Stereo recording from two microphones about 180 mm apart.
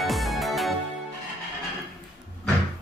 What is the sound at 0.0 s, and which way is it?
Music, centre (ahead or behind).